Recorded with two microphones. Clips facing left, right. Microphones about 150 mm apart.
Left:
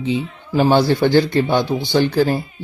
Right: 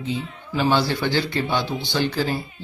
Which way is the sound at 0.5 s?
45° left (ahead or behind).